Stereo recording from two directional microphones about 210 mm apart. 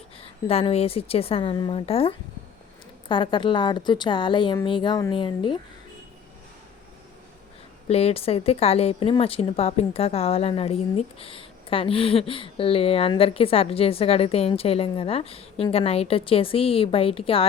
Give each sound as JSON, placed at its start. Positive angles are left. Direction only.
{"t": 0.2, "sound": "a woman's voice", "side_deg": 25}
{"t": 7.9, "sound": "a woman's voice", "side_deg": 30}